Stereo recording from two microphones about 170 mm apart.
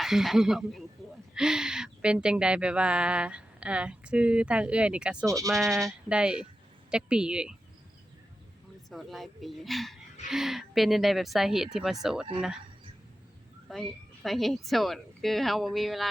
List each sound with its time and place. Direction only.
0.0 s speech: centre (ahead or behind)
5.2 s speech: 20° right (ahead or behind)
5.5 s speech: centre (ahead or behind)
8.9 s speech: centre (ahead or behind)
13.7 s speech: centre (ahead or behind)